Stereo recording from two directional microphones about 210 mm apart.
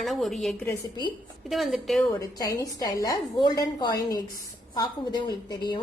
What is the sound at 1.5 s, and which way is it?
Speech, centre (ahead or behind).